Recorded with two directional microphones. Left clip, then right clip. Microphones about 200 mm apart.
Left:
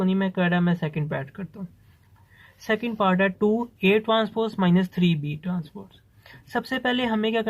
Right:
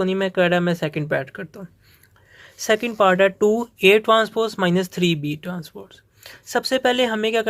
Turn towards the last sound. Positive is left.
turn(degrees=-25)  # may be behind; listen again after turning